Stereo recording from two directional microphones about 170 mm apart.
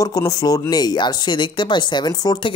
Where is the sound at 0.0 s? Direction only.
20° left (ahead or behind).